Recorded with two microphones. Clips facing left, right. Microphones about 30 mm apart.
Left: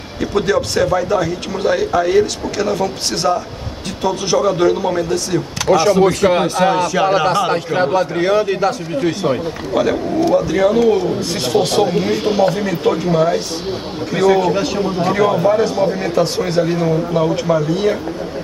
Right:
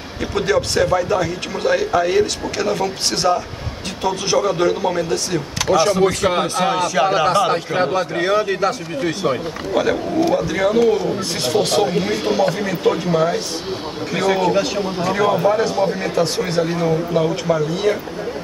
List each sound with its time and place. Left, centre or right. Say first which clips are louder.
0.2 s speech: left 2 dB; centre